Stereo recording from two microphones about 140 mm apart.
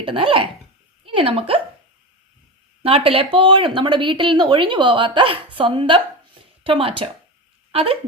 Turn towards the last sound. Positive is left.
turn(degrees=-40)  # may be behind; listen again after turning